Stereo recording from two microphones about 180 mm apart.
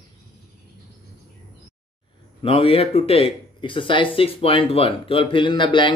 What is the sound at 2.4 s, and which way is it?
Speech, 30° left (ahead or behind).